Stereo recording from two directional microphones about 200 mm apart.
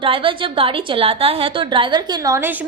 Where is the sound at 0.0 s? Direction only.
25° right (ahead or behind).